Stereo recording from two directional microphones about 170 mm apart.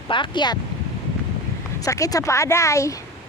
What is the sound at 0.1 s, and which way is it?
Speech, 30° left (ahead or behind).